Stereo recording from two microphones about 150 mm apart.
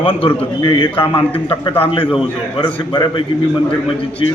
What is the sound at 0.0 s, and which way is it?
A man's voice, 35° left (ahead or behind).